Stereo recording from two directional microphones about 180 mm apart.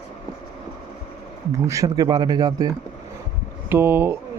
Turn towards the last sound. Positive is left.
turn(degrees=-10)  # may be behind; listen again after turning